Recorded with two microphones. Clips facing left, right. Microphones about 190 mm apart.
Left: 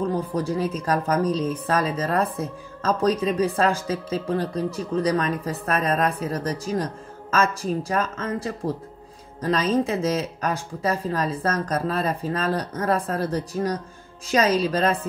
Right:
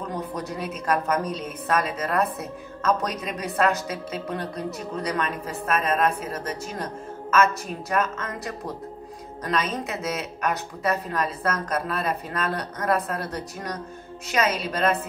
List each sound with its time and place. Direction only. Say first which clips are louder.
0.1 s a woman's voice: left 6 dB; 30° left (ahead or behind)